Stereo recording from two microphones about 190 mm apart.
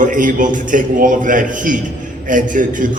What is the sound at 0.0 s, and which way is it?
A man's voice, 45° right (ahead or behind).